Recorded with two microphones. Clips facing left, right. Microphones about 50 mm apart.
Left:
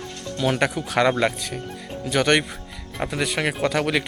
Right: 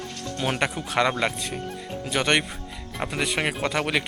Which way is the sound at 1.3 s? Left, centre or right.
Centre.